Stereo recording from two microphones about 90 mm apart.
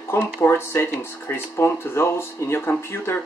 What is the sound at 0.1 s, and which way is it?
Speech, 25° left (ahead or behind).